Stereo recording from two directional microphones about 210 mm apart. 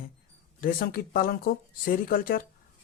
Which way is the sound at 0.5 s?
45° left (ahead or behind).